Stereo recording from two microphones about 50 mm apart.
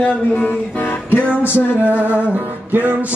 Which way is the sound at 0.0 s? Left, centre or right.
Left.